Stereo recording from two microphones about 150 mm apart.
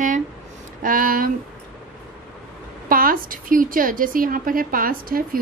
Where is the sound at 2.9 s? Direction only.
70° right (ahead or behind).